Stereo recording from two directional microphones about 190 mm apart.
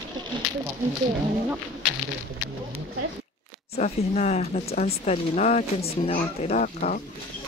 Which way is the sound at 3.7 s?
35° left (ahead or behind).